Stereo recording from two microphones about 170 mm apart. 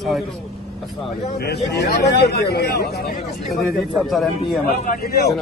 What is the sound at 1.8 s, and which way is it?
Speech, 80° left.